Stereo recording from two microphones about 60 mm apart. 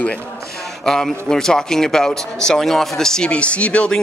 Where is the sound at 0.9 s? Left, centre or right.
Centre.